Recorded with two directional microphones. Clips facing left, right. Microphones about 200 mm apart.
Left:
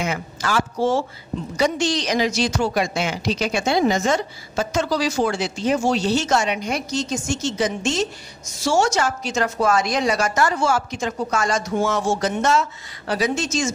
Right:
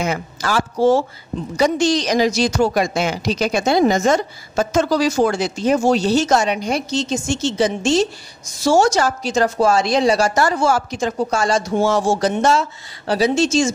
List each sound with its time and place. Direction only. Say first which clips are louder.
0.0 s speech: right 3 dB; 35° right (ahead or behind)